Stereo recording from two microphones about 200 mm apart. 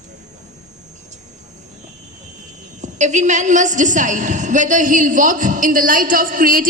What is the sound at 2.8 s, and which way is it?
A woman's voice, 35° right (ahead or behind).